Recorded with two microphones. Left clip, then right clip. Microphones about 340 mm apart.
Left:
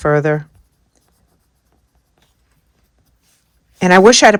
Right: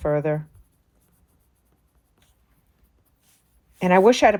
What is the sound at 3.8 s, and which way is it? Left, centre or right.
Speech, left.